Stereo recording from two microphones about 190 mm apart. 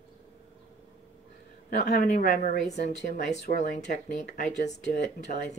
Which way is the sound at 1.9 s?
50° left (ahead or behind).